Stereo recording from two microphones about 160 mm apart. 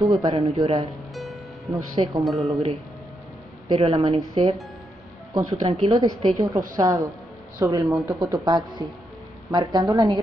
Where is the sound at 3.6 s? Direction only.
30° right (ahead or behind).